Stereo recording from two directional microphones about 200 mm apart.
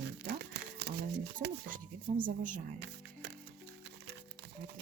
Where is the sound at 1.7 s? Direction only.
40° right (ahead or behind).